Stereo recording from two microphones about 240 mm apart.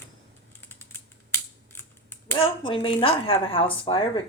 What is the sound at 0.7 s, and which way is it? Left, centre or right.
Typing, centre.